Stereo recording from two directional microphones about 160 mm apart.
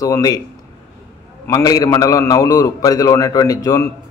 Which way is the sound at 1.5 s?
20° left (ahead or behind).